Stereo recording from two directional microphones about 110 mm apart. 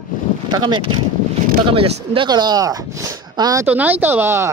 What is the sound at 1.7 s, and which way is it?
Speech, 65° right (ahead or behind).